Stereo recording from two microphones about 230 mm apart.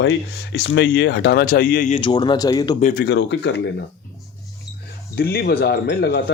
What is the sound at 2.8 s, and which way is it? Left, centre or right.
Speech, left.